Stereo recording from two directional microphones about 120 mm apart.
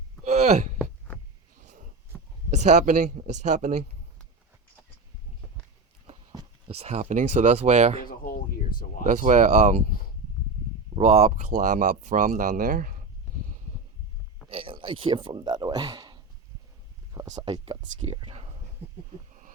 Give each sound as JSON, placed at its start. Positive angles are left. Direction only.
{"t": 0.3, "sound": "speech", "side_deg": -65}
{"t": 2.5, "sound": "speech", "side_deg": -80}
{"t": 6.7, "sound": "speech", "side_deg": -60}
{"t": 9.0, "sound": "speech", "side_deg": -90}
{"t": 10.9, "sound": "speech", "side_deg": -60}
{"t": 14.5, "sound": "speech", "side_deg": -50}
{"t": 17.2, "sound": "a sound", "side_deg": -35}
{"t": 17.5, "sound": "speech", "side_deg": -50}